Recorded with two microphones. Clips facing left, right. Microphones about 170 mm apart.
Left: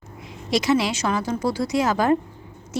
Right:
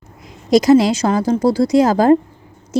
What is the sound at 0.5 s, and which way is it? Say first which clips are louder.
A woman's voice: right 10 dB; 40° right (ahead or behind).